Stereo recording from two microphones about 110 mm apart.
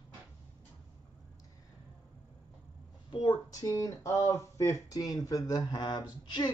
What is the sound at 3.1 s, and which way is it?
Speech, 45° left (ahead or behind).